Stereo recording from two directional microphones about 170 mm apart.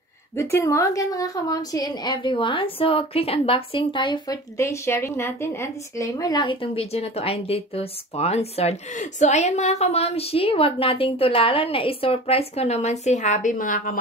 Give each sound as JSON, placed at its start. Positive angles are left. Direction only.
{"t": 0.4, "sound": "a woman's voice", "side_deg": 15}